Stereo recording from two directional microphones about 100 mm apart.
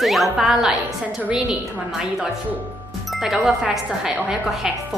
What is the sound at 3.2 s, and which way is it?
A woman's voice, 5° right (ahead or behind).